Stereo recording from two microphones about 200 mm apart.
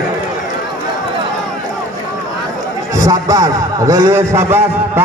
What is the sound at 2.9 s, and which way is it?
A man's voice, 15° right (ahead or behind).